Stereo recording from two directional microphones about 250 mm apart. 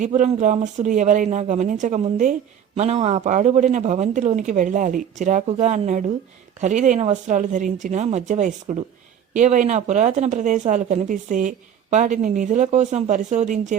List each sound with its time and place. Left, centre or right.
0.0 s speech: right